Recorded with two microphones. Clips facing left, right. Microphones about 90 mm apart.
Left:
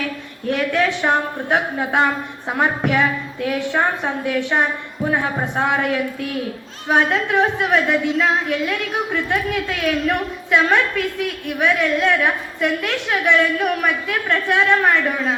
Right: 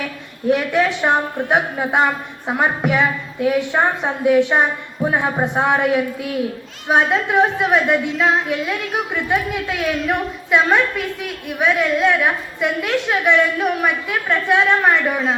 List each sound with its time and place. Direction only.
0.5 s a woman's voice: 15° right (ahead or behind)